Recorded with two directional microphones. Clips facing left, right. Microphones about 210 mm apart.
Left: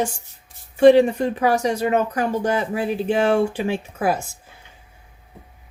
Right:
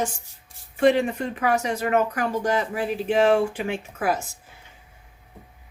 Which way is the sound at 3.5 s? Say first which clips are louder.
Left 4 dB; 30° left (ahead or behind).